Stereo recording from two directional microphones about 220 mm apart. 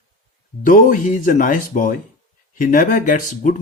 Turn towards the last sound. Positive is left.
turn(degrees=35)  # may be behind; listen again after turning